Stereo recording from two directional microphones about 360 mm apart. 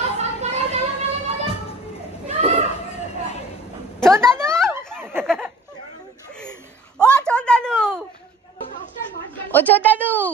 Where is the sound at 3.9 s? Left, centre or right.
Centre.